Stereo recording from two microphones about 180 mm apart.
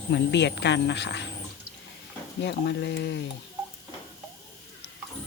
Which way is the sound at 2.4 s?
70° left (ahead or behind).